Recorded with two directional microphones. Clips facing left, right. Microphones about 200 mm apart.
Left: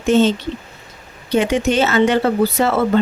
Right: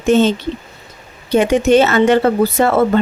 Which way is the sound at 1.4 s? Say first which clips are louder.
Right 5 dB; 55° right (ahead or behind).